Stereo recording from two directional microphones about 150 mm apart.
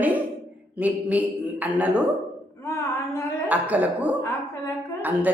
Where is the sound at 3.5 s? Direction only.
10° right (ahead or behind).